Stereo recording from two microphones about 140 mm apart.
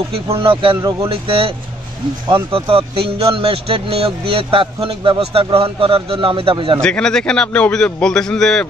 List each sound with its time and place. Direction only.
0.1 s a man's voice: 40° right (ahead or behind)
2.5 s a man's voice: 40° right (ahead or behind)
6.8 s a man's voice: 5° left (ahead or behind)